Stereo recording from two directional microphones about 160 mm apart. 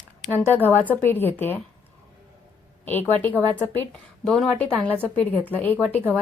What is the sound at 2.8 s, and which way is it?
A woman's voice, 10° left (ahead or behind).